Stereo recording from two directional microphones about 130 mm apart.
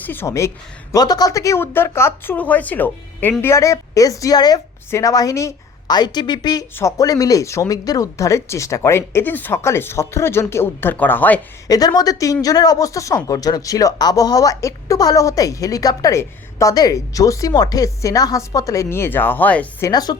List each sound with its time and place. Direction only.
0.0 s speech: 15° left (ahead or behind)
11.7 s speech: 30° left (ahead or behind); by 19.6 s 10° left (ahead or behind)
19.8 s a woman's voice: 30° left (ahead or behind)